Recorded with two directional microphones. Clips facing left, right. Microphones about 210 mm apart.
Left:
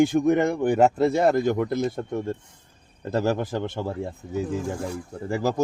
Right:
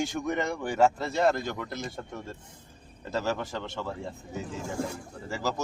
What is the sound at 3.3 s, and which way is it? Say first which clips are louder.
Speech: left 6 dB; 55° left (ahead or behind).